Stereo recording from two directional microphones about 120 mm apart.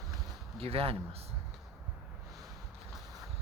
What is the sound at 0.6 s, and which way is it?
Speech, 55° right (ahead or behind).